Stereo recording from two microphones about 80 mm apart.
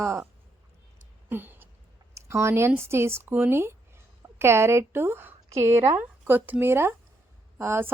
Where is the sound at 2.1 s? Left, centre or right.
Right.